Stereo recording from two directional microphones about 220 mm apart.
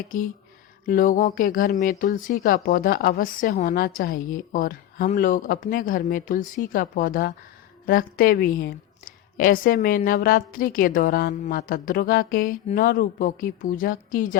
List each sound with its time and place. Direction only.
0.9 s a woman's voice: 40° left (ahead or behind)